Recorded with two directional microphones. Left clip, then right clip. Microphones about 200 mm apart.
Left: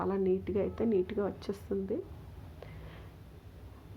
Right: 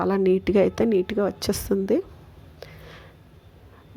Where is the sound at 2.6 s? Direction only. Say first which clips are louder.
Right 9 dB; 30° right (ahead or behind).